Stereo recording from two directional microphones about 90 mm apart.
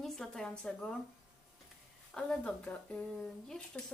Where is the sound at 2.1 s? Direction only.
15° left (ahead or behind).